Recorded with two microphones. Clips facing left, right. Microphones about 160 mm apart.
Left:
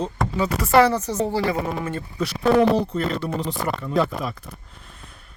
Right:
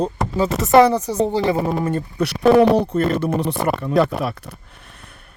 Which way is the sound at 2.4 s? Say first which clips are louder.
Right 4 dB; 65° right (ahead or behind).